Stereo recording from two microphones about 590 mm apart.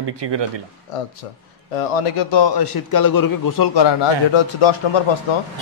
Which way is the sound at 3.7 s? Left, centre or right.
Left.